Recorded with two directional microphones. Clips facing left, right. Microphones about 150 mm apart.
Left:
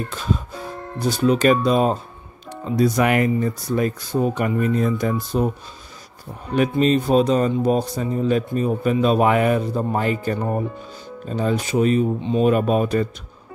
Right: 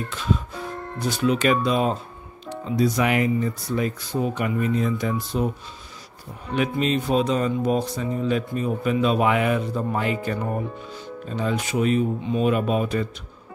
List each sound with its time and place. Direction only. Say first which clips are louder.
1.0 s speech: left 4 dB; 35° left (ahead or behind)
6.5 s speech: left 5 dB; 40° left (ahead or behind)
12.4 s speech: left 4 dB; 40° left (ahead or behind)